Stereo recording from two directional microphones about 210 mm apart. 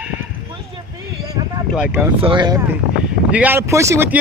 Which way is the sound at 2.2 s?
20° right (ahead or behind).